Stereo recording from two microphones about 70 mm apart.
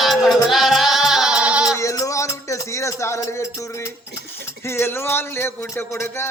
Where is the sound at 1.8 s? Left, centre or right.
Left.